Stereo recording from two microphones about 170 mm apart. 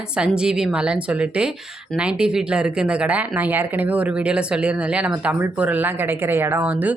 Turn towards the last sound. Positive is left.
turn(degrees=-10)  # may be behind; listen again after turning